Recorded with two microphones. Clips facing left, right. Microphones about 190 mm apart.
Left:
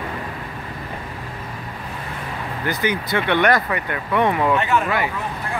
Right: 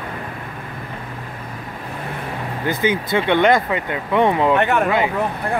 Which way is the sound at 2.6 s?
20° right (ahead or behind).